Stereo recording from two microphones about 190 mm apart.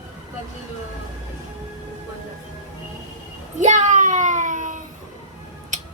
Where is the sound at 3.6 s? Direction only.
40° right (ahead or behind).